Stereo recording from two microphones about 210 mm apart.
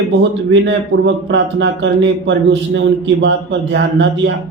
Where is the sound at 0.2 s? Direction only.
55° right (ahead or behind).